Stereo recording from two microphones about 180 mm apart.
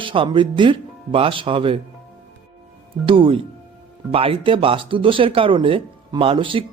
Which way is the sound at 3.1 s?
30° right (ahead or behind).